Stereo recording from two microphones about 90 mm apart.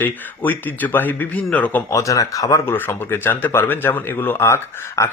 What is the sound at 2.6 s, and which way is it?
Speech, 25° left (ahead or behind).